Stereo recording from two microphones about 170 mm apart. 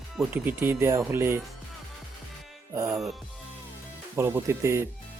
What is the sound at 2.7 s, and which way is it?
Speech, 15° right (ahead or behind).